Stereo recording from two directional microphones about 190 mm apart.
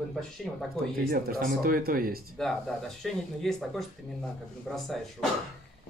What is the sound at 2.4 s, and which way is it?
Speech, centre (ahead or behind).